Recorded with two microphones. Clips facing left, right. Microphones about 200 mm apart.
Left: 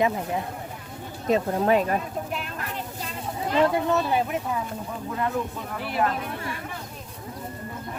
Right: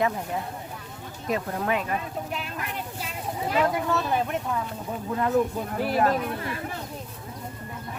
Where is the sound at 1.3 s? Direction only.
30° left (ahead or behind).